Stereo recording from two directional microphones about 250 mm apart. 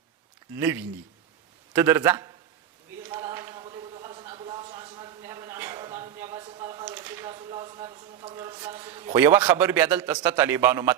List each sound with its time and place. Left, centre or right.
1.7 s a man's voice: centre
3.1 s a sound: centre
7.3 s a man's voice: centre